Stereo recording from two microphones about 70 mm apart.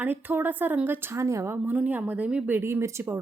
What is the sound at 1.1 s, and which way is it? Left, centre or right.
Speech, right.